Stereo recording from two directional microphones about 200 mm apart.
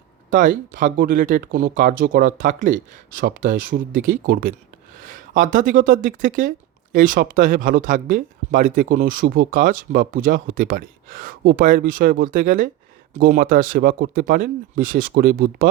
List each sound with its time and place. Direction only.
0.3 s speech: 40° right (ahead or behind)